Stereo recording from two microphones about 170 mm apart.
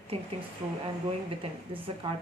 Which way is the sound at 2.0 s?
30° right (ahead or behind).